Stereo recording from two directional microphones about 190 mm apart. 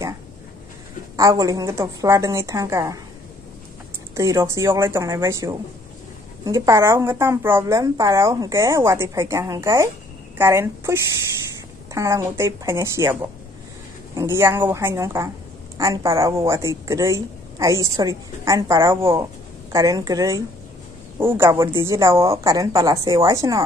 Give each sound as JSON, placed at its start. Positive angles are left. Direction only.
{"t": 1.1, "sound": "a woman's voice", "side_deg": -15}
{"t": 4.1, "sound": "a woman's voice", "side_deg": -15}